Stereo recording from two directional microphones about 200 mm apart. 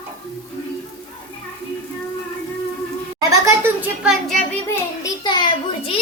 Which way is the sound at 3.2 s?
15° right (ahead or behind).